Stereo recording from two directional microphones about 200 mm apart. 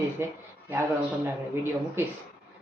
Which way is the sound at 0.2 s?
15° right (ahead or behind).